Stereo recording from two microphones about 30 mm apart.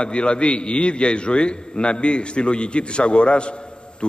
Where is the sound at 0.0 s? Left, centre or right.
Left.